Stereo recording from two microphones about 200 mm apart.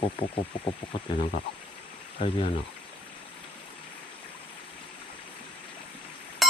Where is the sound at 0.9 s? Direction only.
25° left (ahead or behind).